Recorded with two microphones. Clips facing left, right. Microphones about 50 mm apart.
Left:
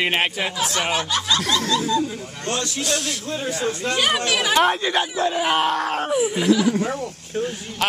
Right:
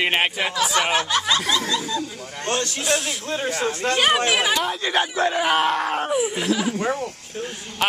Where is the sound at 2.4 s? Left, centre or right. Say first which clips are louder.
Right 2 dB; right.